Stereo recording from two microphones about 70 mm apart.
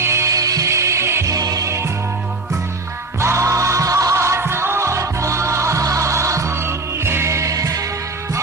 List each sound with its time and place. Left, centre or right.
0.0 s music: right
1.3 s music: right
1.6 s music: right
3.2 s music: right